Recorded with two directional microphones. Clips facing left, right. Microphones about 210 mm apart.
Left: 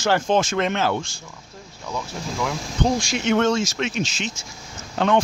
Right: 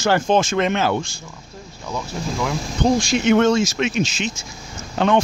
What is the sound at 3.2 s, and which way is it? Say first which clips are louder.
Speech: right 4 dB; 10° right (ahead or behind).